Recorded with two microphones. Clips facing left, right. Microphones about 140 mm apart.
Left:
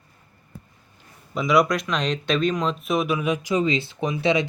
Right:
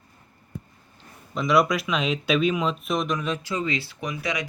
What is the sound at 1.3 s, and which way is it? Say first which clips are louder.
Speech: left 1 dB; centre (ahead or behind).